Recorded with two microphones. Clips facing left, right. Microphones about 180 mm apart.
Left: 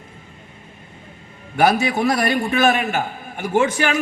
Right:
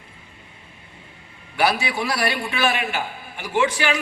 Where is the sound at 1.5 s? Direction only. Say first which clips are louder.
Left 5 dB; 45° left (ahead or behind).